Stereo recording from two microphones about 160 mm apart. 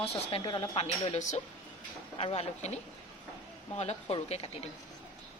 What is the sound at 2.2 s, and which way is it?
Speech, 35° left (ahead or behind).